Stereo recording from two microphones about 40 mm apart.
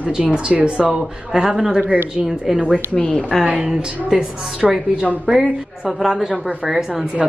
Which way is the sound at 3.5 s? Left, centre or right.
Right.